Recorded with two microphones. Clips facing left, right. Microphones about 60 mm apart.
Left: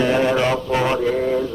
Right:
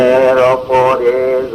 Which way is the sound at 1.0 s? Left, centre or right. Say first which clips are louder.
Right 8 dB; right.